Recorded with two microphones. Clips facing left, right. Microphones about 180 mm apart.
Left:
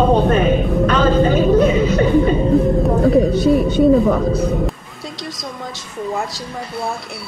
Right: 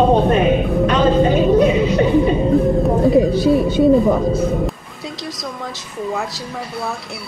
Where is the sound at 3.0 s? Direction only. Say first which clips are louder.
Even; centre (ahead or behind).